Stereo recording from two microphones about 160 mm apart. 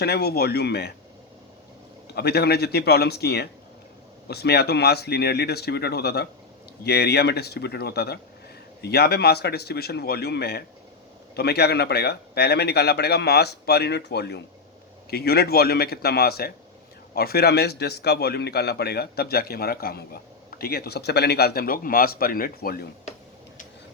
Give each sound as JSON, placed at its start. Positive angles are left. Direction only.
{"t": 0.0, "sound": "a man's voice", "side_deg": 85}
{"t": 2.1, "sound": "a man's voice", "side_deg": 90}
{"t": 15.1, "sound": "a man's voice", "side_deg": 75}